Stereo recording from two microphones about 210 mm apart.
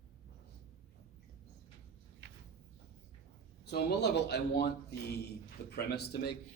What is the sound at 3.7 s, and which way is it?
A man's voice, 50° left (ahead or behind).